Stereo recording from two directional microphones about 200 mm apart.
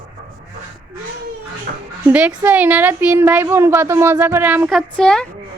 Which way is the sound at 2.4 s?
10° right (ahead or behind).